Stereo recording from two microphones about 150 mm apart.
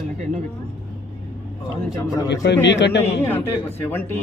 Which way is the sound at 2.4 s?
90° left.